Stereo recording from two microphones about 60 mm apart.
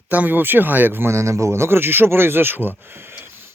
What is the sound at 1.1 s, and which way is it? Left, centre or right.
Speech, right.